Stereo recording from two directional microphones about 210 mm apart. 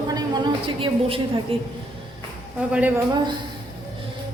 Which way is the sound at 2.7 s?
5° right (ahead or behind).